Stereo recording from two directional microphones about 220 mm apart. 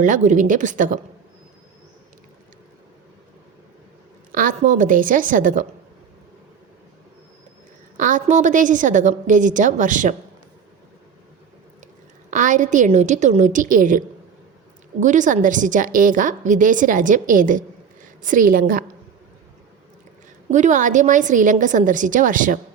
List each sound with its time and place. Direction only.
0.0 s a woman's voice: 35° right (ahead or behind)
4.3 s a woman's voice: 40° right (ahead or behind)
7.9 s a woman's voice: 35° right (ahead or behind)
12.3 s a woman's voice: 35° right (ahead or behind)
15.0 s a woman's voice: 35° right (ahead or behind)
20.5 s a woman's voice: 35° right (ahead or behind)